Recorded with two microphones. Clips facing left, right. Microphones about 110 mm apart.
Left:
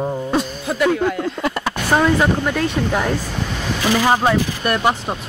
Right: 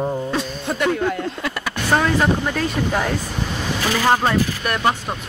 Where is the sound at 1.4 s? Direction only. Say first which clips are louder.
Left 5 dB; 35° left (ahead or behind).